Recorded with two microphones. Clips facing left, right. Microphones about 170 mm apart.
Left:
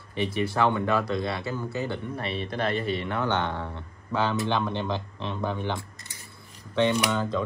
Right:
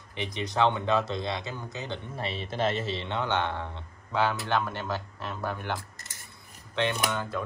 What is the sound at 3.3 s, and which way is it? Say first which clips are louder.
Speech: left 1 dB; 10° right (ahead or behind).